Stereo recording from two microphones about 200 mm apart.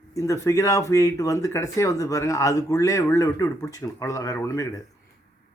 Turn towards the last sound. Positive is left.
turn(degrees=15)  # may be behind; listen again after turning